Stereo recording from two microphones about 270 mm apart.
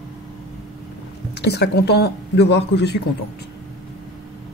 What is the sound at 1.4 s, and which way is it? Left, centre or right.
Speech, left.